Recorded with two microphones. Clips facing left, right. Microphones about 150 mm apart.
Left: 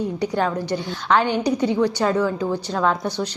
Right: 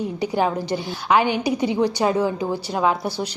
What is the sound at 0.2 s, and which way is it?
A woman's voice, 10° right (ahead or behind).